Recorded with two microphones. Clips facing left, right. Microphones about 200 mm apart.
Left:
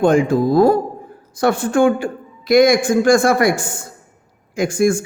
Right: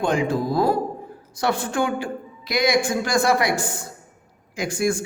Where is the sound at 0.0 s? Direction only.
50° left (ahead or behind).